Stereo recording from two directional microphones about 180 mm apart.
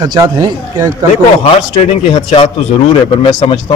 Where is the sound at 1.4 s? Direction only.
30° left (ahead or behind).